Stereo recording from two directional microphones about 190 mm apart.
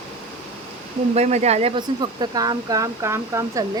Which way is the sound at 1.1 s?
35° right (ahead or behind).